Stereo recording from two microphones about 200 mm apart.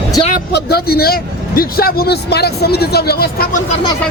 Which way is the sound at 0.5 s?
50° left (ahead or behind).